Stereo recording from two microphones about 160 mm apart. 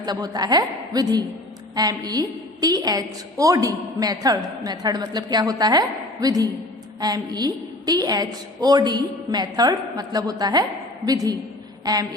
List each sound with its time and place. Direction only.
0.0 s a woman's voice: 25° right (ahead or behind)